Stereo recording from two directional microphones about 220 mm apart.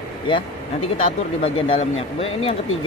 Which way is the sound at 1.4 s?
25° left (ahead or behind).